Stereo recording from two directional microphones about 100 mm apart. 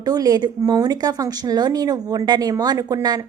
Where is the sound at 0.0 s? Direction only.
40° right (ahead or behind).